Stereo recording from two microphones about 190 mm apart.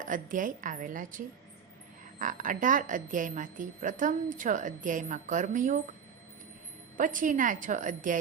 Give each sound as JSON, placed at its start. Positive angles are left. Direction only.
{"t": 0.0, "sound": "a woman's voice", "side_deg": -45}
{"t": 6.9, "sound": "a woman's voice", "side_deg": -45}